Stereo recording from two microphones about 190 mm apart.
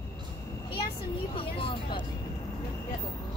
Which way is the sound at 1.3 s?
30° left (ahead or behind).